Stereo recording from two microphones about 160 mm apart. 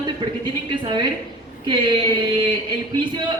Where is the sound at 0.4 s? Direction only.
30° right (ahead or behind).